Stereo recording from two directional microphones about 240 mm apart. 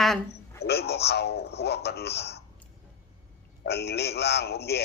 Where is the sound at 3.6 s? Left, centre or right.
Left.